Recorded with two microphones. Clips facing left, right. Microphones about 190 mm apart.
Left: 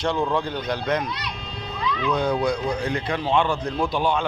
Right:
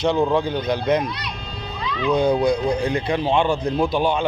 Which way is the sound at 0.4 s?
5° right (ahead or behind).